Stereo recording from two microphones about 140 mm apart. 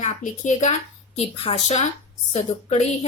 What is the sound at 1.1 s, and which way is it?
A woman's voice, 45° left (ahead or behind).